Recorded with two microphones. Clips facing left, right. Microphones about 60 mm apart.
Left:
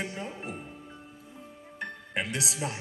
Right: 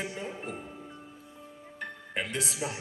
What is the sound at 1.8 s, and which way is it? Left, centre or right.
Music, centre.